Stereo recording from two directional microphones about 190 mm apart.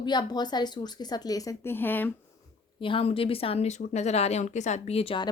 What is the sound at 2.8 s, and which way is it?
A woman's voice, 30° left (ahead or behind).